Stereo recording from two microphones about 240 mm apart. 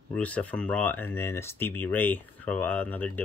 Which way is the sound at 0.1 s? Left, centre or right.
Centre.